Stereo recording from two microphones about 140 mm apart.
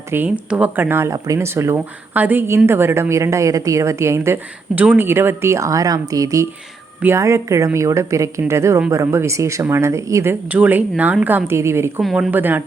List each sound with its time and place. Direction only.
0.1 s speech: 10° right (ahead or behind)